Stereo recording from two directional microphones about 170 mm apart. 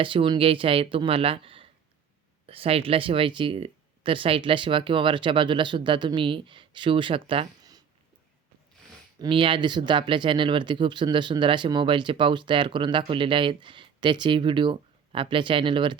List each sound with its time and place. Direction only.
0.0 s speech: 30° right (ahead or behind)
9.1 s speech: 25° right (ahead or behind)